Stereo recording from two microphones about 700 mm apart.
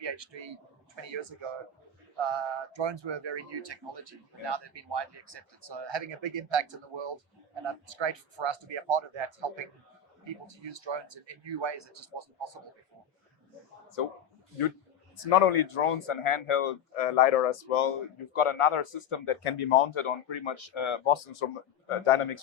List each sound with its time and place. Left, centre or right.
0.0 s a man's voice: right
15.2 s speech: left